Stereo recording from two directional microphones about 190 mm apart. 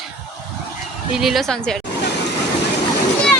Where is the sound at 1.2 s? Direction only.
Centre (ahead or behind).